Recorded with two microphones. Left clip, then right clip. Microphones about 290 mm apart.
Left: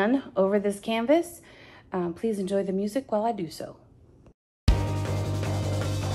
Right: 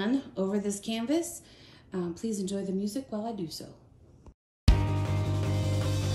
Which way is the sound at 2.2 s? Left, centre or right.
Centre.